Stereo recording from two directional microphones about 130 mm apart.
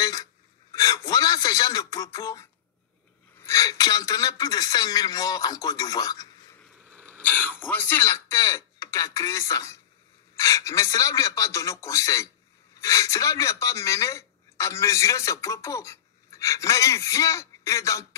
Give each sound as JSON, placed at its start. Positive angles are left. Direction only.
{"t": 0.0, "sound": "a sound", "side_deg": 25}
{"t": 3.3, "sound": "a man's voice", "side_deg": 25}
{"t": 7.1, "sound": "a man's voice", "side_deg": 15}